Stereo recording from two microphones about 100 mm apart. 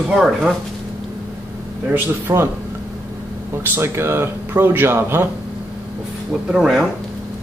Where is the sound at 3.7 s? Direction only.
25° right (ahead or behind).